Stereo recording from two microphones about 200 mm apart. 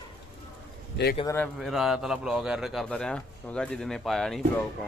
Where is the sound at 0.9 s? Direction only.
55° left (ahead or behind).